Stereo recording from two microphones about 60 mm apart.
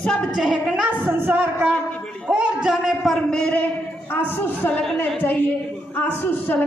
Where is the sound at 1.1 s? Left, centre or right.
Right.